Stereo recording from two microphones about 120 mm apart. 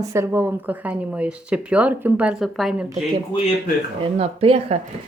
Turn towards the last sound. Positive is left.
turn(degrees=-60)  # may be behind; listen again after turning